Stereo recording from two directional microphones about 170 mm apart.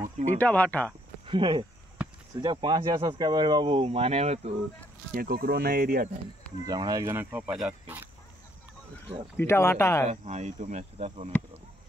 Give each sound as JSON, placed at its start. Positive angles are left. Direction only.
{"t": 0.3, "sound": "speech", "side_deg": 10}
{"t": 1.2, "sound": "speech", "side_deg": -30}
{"t": 2.0, "sound": "a sound", "side_deg": -5}
{"t": 2.3, "sound": "speech", "side_deg": -25}
{"t": 5.1, "sound": "speech", "side_deg": -60}
{"t": 6.6, "sound": "speech", "side_deg": -25}
{"t": 9.4, "sound": "speech", "side_deg": 15}
{"t": 10.0, "sound": "speech", "side_deg": -40}